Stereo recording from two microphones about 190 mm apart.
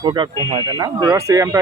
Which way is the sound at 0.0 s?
25° right (ahead or behind).